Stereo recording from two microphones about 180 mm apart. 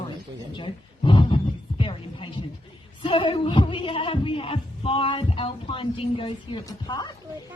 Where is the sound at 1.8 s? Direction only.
30° left (ahead or behind).